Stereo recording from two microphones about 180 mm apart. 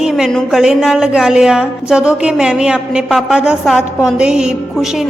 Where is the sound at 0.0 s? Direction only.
Centre (ahead or behind).